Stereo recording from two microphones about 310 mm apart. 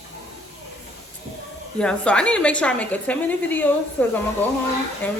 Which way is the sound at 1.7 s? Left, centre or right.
Centre.